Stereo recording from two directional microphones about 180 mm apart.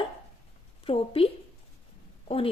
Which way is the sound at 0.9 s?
30° left (ahead or behind).